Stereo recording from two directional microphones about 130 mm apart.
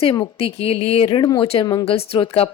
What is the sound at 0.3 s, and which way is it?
Speech, 50° left (ahead or behind).